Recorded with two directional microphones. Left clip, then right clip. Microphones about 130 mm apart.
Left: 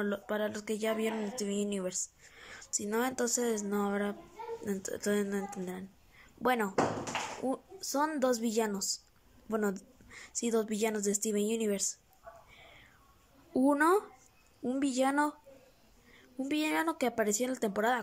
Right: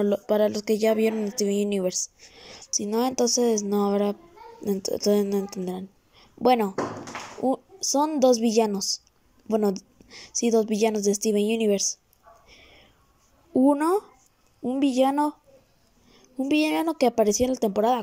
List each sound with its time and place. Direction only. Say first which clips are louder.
0.0 s a woman's voice: right 12 dB; 35° right (ahead or behind)
2.3 s a sound: right 5 dB; 25° right (ahead or behind)
2.8 s a woman's voice: right 8 dB; 25° right (ahead or behind)
12.4 s a sound: right 4 dB; 25° right (ahead or behind)
13.5 s speech: right 6 dB; 10° right (ahead or behind)
16.4 s a woman's voice: right 8 dB; 20° right (ahead or behind)